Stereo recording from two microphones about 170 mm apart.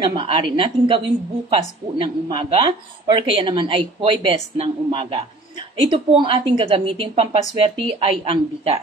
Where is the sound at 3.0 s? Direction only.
30° right (ahead or behind).